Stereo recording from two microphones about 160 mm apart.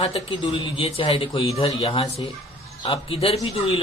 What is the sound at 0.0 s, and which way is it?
Speech, 35° left (ahead or behind).